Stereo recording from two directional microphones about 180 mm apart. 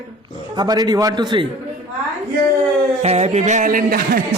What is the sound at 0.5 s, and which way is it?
Speech, 20° right (ahead or behind).